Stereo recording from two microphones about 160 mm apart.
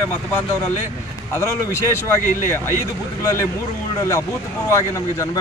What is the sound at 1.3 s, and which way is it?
Speech, 15° left (ahead or behind).